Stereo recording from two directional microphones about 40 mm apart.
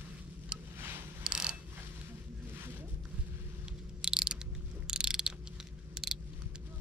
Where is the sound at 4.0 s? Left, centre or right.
Centre.